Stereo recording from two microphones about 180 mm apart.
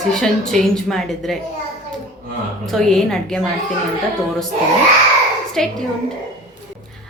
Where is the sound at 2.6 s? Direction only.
Centre (ahead or behind).